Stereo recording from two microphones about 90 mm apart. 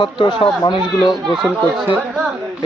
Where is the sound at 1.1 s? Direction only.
Centre (ahead or behind).